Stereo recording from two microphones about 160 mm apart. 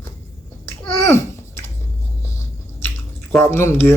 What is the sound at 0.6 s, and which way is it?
Babbling, 15° left (ahead or behind).